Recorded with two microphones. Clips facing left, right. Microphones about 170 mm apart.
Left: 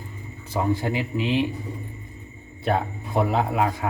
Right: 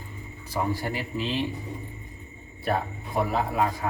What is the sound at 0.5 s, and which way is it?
Speech, 20° left (ahead or behind).